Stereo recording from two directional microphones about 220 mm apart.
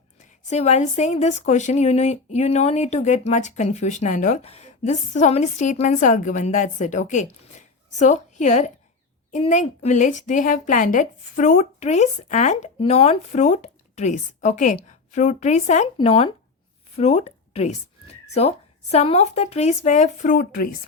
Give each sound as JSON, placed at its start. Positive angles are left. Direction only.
{"t": 0.5, "sound": "speech", "side_deg": 30}